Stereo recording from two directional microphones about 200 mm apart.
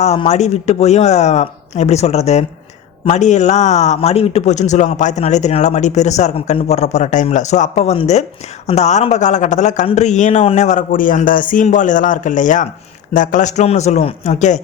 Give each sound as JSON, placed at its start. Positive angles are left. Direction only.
{"t": 0.0, "sound": "speech", "side_deg": 35}